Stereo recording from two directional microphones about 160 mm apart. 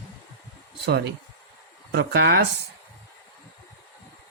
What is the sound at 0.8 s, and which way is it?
Speech, 90° right.